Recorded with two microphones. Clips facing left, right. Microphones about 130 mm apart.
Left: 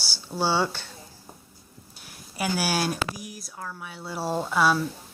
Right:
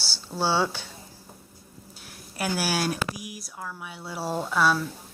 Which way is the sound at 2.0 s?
Centre (ahead or behind).